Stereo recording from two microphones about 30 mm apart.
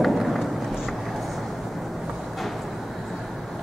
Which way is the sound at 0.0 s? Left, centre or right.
Centre.